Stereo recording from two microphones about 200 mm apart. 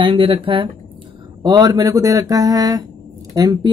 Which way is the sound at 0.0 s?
25° right (ahead or behind).